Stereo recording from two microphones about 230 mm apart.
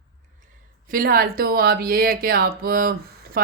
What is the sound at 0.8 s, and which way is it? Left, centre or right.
Speech, right.